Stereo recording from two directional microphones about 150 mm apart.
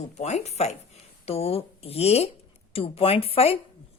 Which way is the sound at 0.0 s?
50° left (ahead or behind).